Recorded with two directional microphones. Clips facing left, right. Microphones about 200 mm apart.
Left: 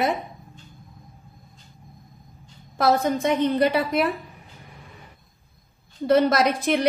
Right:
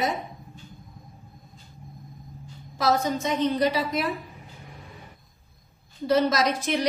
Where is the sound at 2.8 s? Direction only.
55° left (ahead or behind).